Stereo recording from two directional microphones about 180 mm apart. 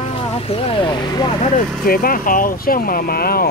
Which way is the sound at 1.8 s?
55° left (ahead or behind).